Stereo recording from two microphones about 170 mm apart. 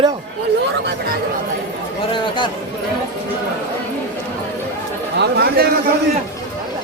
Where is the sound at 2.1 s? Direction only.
30° left (ahead or behind).